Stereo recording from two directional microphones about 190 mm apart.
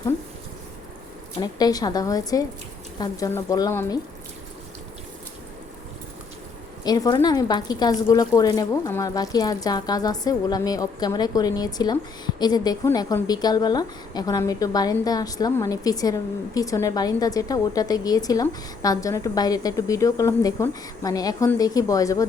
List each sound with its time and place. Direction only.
1.4 s speech: 20° left (ahead or behind)
6.8 s speech: 20° left (ahead or behind)